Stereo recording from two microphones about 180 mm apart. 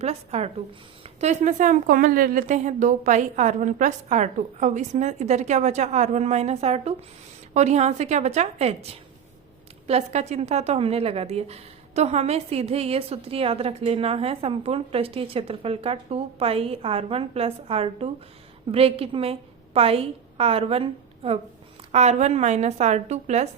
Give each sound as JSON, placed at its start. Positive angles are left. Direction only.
{"t": 0.0, "sound": "a woman's voice", "side_deg": -35}